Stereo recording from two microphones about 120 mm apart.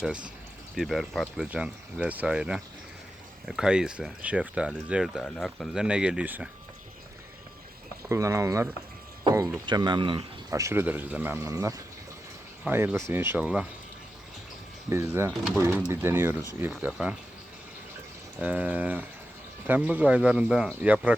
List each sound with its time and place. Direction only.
0.0 s speech: 10° right (ahead or behind)
1.5 s speech: 10° right (ahead or behind)
8.1 s speech: 25° right (ahead or behind)
9.6 s speech: 40° right (ahead or behind)
10.5 s speech: 25° right (ahead or behind)
14.8 s speech: 25° right (ahead or behind)
18.3 s speech: 10° right (ahead or behind)